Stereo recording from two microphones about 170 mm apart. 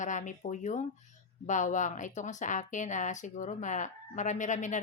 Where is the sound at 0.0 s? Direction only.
45° left (ahead or behind).